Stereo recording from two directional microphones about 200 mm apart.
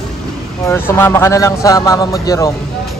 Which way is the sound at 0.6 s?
10° left (ahead or behind).